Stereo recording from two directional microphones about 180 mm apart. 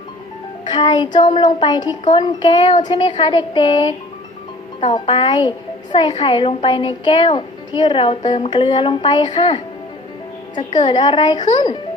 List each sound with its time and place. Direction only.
0.6 s a woman's voice: 25° left (ahead or behind)